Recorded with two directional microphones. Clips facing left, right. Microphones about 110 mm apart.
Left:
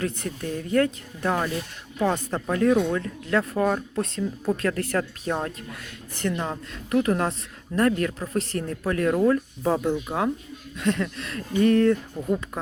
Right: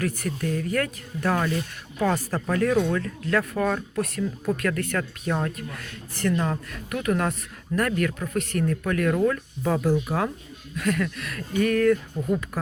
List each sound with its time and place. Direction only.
0.0 s speech: 25° left (ahead or behind)
5.7 s speech: 20° left (ahead or behind)
6.9 s speech: 30° left (ahead or behind)